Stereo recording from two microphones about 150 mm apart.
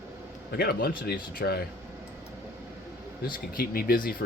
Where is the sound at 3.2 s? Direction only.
75° left (ahead or behind).